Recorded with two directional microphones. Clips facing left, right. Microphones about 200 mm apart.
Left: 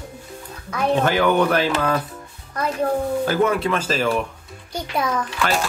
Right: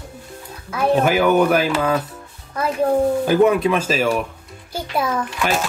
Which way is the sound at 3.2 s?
15° right (ahead or behind).